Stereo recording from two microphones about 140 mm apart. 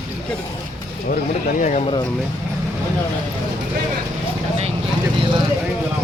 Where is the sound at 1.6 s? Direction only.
65° left (ahead or behind).